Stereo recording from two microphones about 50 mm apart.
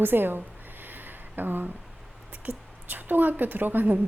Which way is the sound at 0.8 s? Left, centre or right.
Right.